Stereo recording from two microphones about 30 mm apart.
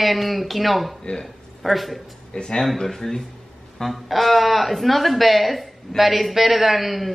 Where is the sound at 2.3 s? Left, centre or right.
Left.